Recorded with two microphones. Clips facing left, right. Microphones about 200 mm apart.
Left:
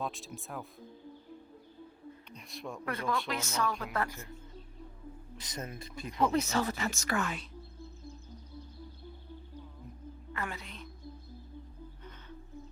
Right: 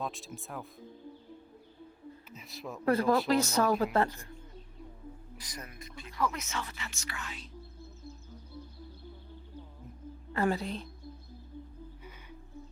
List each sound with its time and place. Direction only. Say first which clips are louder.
0.0 s speech: even; centre (ahead or behind)
2.3 s speech: even; centre (ahead or behind)
2.8 s speech: right 9 dB; 35° right (ahead or behind)
5.4 s speech: left 6 dB; 25° left (ahead or behind); by 7.4 s 50° left (ahead or behind)
10.3 s speech: right 11 dB; 35° right (ahead or behind)